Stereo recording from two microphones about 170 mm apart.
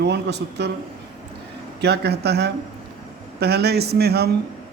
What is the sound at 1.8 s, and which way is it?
Speech, 75° right (ahead or behind).